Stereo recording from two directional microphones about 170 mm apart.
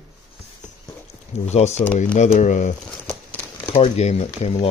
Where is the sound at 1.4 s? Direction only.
40° left (ahead or behind).